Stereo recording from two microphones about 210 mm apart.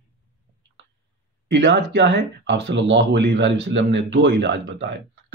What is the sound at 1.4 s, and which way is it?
Speech, 55° right (ahead or behind).